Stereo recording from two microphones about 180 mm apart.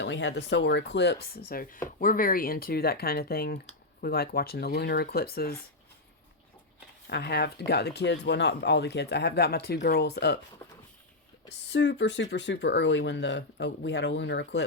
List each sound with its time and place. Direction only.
0.0 s speech: 80° left; by 5.5 s 60° left (ahead or behind)
7.1 s speech: 65° left (ahead or behind)
11.7 s speech: 80° left